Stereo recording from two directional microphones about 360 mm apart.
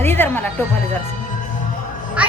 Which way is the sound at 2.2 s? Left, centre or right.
Centre.